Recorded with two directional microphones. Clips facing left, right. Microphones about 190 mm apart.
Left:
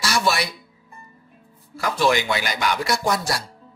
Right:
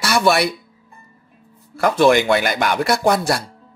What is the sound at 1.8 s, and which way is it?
Speech, 55° right (ahead or behind).